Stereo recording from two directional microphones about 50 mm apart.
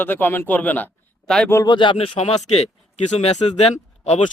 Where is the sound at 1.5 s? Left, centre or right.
Left.